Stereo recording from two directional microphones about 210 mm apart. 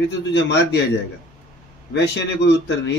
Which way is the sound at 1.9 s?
55° left (ahead or behind).